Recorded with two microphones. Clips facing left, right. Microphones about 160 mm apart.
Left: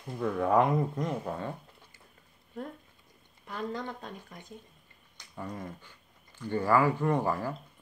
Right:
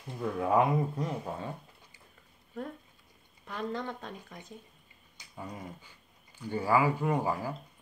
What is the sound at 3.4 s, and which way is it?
Speech, 35° right (ahead or behind).